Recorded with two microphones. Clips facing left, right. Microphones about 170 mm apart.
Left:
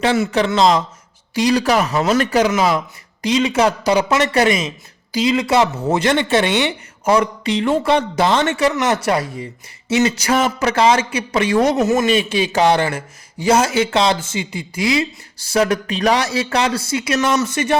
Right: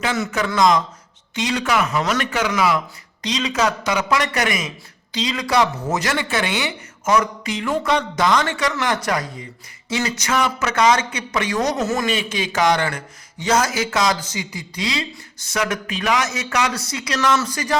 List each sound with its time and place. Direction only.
0.0 s a man's voice: 30° left (ahead or behind)